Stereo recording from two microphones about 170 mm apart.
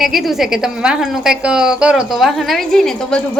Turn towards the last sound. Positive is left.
turn(degrees=0)  # may be behind; listen again after turning